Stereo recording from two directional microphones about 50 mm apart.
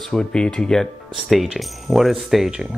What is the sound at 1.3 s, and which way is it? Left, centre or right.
Speech, centre.